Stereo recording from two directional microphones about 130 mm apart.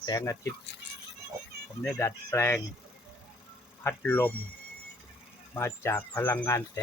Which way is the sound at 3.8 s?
15° left (ahead or behind).